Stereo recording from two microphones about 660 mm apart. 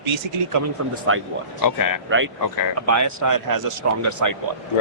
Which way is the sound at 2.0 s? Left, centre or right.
Centre.